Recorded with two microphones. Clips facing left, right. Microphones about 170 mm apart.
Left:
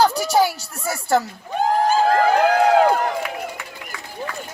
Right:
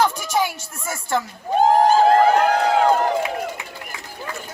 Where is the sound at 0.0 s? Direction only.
35° left (ahead or behind).